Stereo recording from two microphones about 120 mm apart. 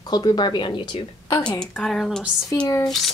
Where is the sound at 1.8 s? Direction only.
5° left (ahead or behind).